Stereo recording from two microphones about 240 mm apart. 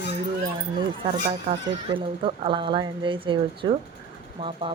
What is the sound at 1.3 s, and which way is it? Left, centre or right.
Speech, right.